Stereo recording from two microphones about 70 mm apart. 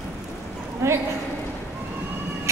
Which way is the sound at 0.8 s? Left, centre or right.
Right.